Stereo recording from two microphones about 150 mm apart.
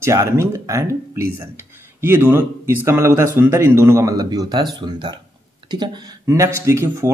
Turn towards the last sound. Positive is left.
turn(degrees=-20)  # may be behind; listen again after turning